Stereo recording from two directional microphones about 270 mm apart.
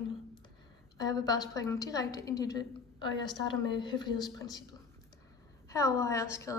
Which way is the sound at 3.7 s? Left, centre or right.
Centre.